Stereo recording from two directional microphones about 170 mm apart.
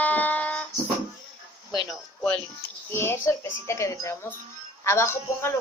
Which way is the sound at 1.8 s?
Centre (ahead or behind).